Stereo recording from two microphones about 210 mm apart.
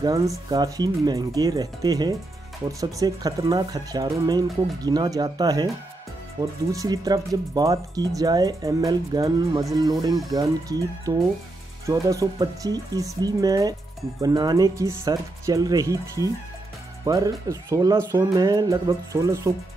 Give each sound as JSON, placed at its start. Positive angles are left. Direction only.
{"t": 0.5, "sound": "speech", "side_deg": -20}